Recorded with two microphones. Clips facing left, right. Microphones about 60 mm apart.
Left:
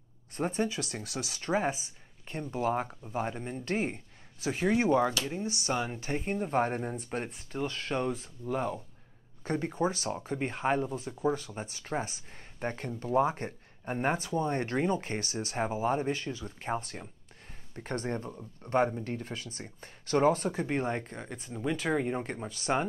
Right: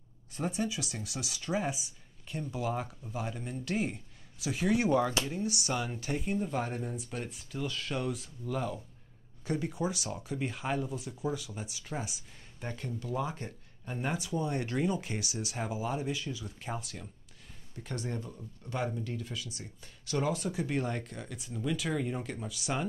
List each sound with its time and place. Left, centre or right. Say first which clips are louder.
0.3 s speech: left 3 dB; left